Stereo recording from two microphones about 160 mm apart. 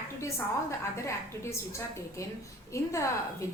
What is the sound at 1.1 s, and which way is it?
A woman's voice, 20° left (ahead or behind).